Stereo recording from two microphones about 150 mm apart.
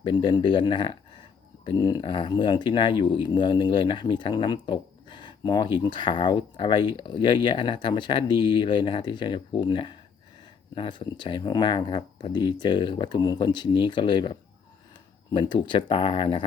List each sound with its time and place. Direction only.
0.0 s speech: 30° left (ahead or behind)